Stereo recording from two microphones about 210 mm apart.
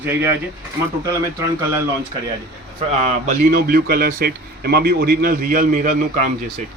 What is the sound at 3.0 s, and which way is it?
A man's voice, 40° right (ahead or behind).